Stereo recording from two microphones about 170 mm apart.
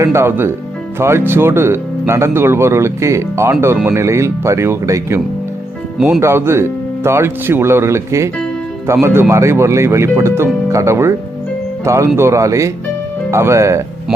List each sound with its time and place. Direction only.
0.0 s speech: 15° right (ahead or behind)